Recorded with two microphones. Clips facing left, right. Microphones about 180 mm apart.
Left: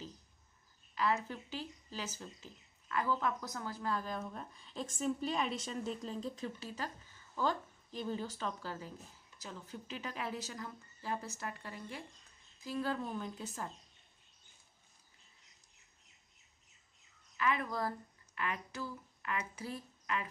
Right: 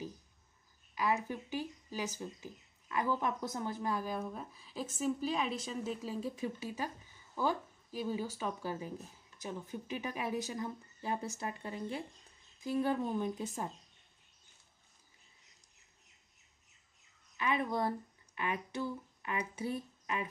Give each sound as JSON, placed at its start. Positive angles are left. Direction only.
{"t": 0.9, "sound": "a woman's voice", "side_deg": -15}
{"t": 17.4, "sound": "speech", "side_deg": -20}